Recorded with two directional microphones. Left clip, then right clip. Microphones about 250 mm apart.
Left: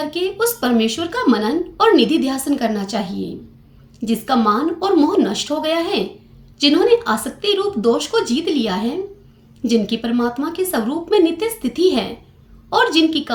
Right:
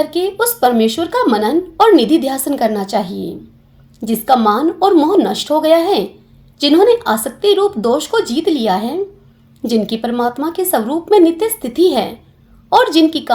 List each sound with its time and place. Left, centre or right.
0.0 s speech: right